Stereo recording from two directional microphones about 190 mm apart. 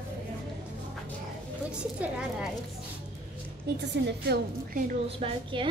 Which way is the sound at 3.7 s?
60° right (ahead or behind).